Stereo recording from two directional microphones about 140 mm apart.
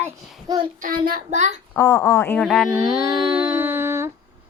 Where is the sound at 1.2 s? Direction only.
55° right (ahead or behind).